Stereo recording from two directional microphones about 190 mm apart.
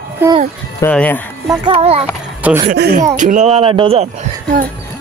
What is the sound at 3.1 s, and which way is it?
Speech, 40° right (ahead or behind).